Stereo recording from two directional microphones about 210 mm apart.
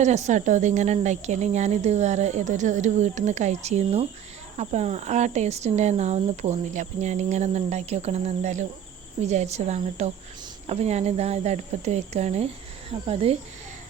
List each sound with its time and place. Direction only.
0.0 s speech: 35° right (ahead or behind)